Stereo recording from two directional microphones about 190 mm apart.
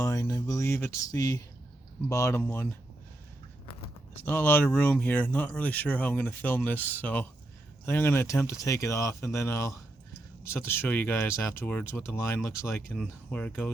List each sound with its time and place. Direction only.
0.0 s speech: 15° left (ahead or behind)
4.3 s speech: 10° left (ahead or behind)